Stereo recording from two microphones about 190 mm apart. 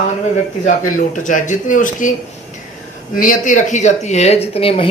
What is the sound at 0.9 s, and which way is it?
Speech, 40° left (ahead or behind).